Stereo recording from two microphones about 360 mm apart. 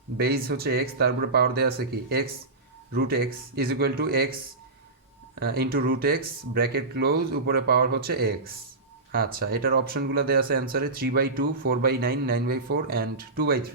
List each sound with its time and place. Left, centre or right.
0.2 s speech: right